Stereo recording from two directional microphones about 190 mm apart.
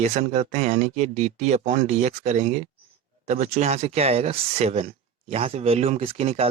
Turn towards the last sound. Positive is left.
turn(degrees=-30)  # may be behind; listen again after turning